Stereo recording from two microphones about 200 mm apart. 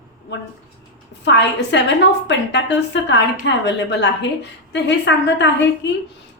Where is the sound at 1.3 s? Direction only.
60° left (ahead or behind).